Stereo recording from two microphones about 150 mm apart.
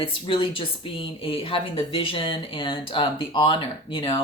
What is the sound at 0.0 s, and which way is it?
Speech, 35° left (ahead or behind).